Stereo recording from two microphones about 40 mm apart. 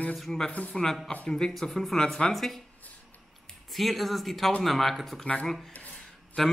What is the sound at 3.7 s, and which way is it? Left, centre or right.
Speech, centre.